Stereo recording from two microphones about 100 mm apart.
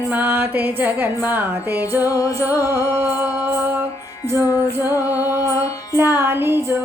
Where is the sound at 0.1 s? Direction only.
20° right (ahead or behind).